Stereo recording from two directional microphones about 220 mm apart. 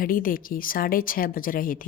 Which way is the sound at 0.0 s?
40° left (ahead or behind).